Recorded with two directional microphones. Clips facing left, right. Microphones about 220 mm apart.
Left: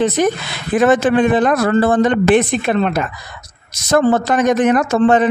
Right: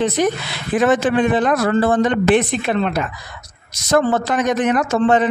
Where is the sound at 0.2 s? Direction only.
50° left (ahead or behind).